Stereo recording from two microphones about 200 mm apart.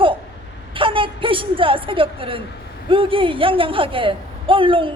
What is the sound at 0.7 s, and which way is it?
A woman's voice, 25° right (ahead or behind).